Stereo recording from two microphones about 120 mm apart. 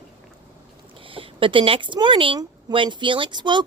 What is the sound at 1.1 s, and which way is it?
A woman's voice, 50° right (ahead or behind).